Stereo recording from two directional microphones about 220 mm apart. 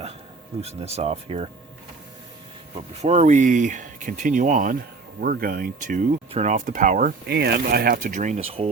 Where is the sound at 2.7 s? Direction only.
30° right (ahead or behind).